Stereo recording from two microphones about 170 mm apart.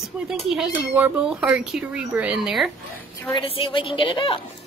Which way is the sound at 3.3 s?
30° left (ahead or behind).